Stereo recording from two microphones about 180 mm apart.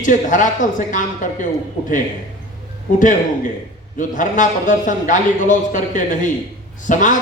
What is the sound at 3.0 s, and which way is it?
A man's voice, 45° left (ahead or behind).